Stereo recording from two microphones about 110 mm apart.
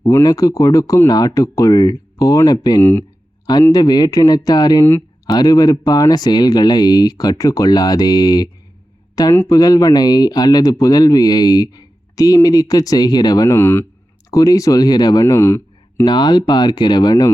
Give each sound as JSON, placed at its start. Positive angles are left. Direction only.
{"t": 0.0, "sound": "speech", "side_deg": 25}
{"t": 9.5, "sound": "speech", "side_deg": 35}
{"t": 13.5, "sound": "speech", "side_deg": 20}
{"t": 14.3, "sound": "speech", "side_deg": 30}
{"t": 16.0, "sound": "speech", "side_deg": 40}